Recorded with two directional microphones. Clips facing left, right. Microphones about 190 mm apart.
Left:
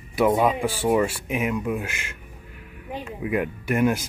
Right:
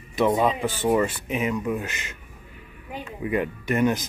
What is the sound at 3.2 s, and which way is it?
Speech, 5° left (ahead or behind).